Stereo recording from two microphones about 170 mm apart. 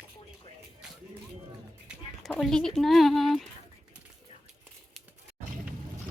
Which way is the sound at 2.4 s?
5° left (ahead or behind).